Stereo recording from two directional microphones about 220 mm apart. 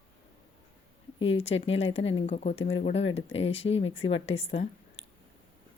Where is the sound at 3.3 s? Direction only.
25° left (ahead or behind).